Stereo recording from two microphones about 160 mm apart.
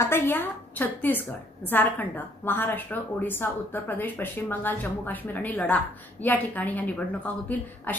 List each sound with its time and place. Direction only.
0.0 s a woman's voice: 15° left (ahead or behind)